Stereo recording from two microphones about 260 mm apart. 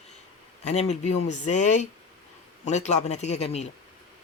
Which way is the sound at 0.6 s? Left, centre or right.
Left.